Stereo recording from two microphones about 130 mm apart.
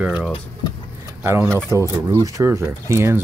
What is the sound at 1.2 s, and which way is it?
Speech, 20° right (ahead or behind).